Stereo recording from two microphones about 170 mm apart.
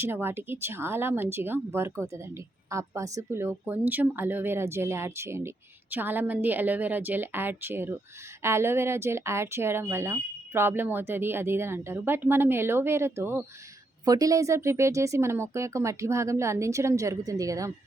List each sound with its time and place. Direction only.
0.0 s speech: 15° right (ahead or behind)